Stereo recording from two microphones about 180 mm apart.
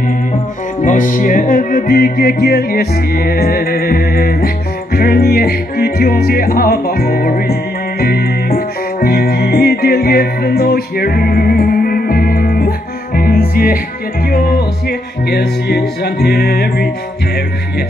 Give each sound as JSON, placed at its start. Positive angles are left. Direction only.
{"t": 0.8, "sound": "music", "side_deg": 45}